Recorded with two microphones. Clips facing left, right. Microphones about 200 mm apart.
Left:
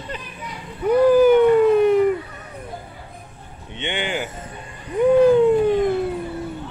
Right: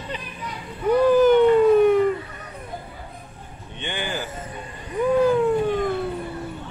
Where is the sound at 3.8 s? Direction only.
20° left (ahead or behind).